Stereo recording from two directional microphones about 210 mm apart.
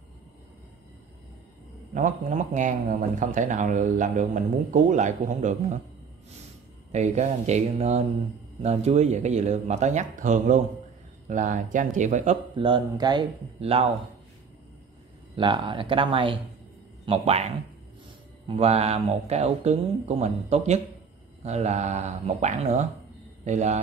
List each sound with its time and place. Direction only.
2.0 s speech: 35° right (ahead or behind)
6.9 s speech: 35° right (ahead or behind)
15.3 s speech: 20° right (ahead or behind)
18.6 s speech: 30° right (ahead or behind)